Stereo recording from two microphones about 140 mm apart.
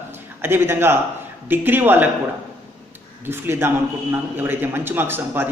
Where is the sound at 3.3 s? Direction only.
15° right (ahead or behind).